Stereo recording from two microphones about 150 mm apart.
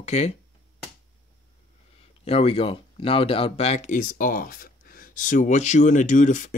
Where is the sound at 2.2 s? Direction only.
40° left (ahead or behind); by 6.5 s 60° left (ahead or behind).